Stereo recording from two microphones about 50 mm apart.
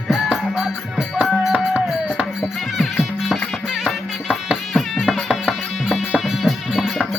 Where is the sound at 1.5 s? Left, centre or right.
Right.